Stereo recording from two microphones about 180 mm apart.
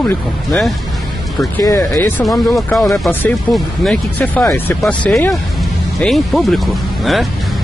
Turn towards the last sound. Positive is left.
turn(degrees=0)  # may be behind; listen again after turning